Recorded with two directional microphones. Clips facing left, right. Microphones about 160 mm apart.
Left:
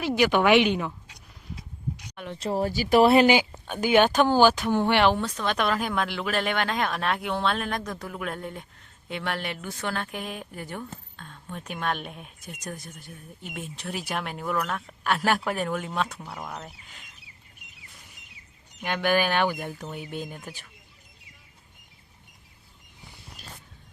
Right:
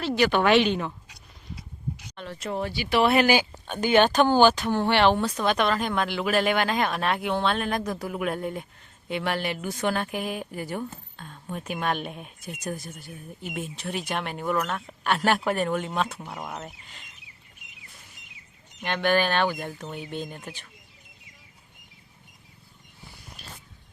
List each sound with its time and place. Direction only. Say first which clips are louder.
0.0 s speech: even; 15° left (ahead or behind)
2.0 s speech: left 1 dB; 15° left (ahead or behind)
2.4 s speech: left 4 dB; 35° left (ahead or behind)
3.3 s speech: even; 10° left (ahead or behind)
5.1 s a woman's voice: right 3 dB; 5° right (ahead or behind)
9.6 s a woman's voice: right 6 dB; 15° right (ahead or behind); by 17.1 s centre (ahead or behind)
18.8 s speech: right 1 dB; 10° left (ahead or behind)
23.4 s a sound: even; 40° left (ahead or behind)